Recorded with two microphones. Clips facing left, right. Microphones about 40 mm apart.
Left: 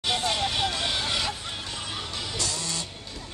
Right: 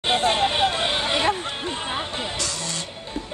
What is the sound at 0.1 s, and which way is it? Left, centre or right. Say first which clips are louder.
Hubbub: right 7 dB; right.